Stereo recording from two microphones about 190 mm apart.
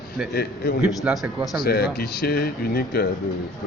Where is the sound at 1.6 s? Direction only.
55° left (ahead or behind).